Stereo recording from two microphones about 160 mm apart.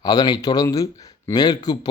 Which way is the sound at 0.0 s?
25° left (ahead or behind).